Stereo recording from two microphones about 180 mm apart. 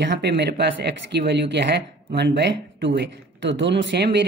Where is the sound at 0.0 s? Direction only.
75° right (ahead or behind).